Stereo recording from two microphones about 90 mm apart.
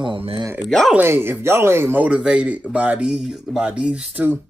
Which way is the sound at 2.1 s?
10° right (ahead or behind).